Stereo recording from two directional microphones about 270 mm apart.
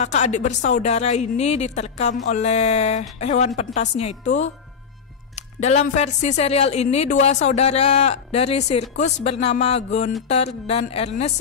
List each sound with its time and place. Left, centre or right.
0.0 s speech: left